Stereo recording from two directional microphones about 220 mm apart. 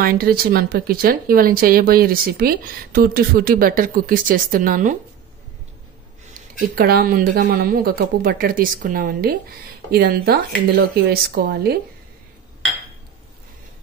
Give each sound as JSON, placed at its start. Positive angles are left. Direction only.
{"t": 0.0, "sound": "speech", "side_deg": -40}
{"t": 6.7, "sound": "speech", "side_deg": -45}